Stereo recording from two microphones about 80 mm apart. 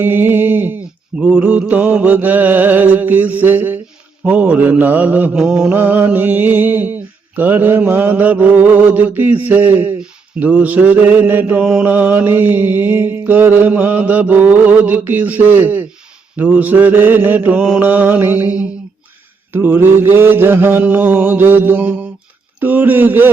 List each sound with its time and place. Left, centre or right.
0.0 s speech: right
4.2 s mantra: centre
5.7 s speech: right
11.6 s mantra: centre
11.9 s speech: right